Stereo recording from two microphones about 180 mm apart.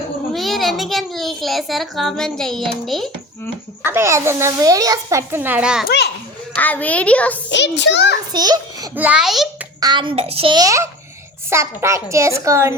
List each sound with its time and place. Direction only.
0.3 s a child's voice: centre (ahead or behind)
3.8 s a child's voice: 15° right (ahead or behind)
5.8 s a child's voice: 65° left (ahead or behind)
6.6 s a woman's voice: 10° left (ahead or behind)
7.5 s a child's voice: 75° left (ahead or behind)
8.3 s a child's voice: 20° right (ahead or behind)
9.0 s a child's voice: 5° right (ahead or behind)
9.8 s a child's voice: 25° right (ahead or behind)